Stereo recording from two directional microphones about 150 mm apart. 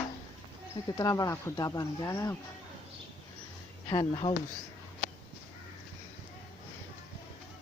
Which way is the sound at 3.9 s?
30° left (ahead or behind).